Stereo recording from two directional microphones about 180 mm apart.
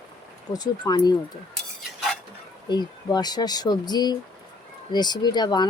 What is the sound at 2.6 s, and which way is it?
Speech, 25° left (ahead or behind).